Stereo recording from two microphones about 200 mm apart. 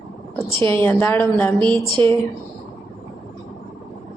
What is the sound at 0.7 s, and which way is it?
Speech, 10° left (ahead or behind).